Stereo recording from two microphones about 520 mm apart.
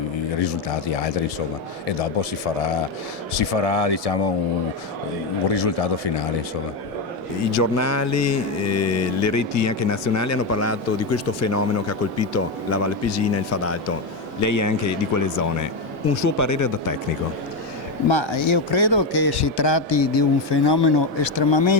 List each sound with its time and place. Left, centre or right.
0.3 s speech: left
3.3 s speech: left
5.5 s speech: left
7.5 s mantra: left
14.4 s speech: left
18.1 s a man's voice: left